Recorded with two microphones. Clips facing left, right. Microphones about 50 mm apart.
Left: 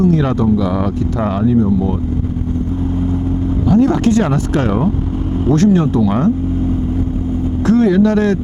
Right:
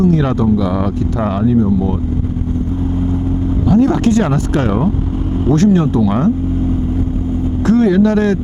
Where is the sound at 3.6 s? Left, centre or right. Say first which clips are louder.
Even; right.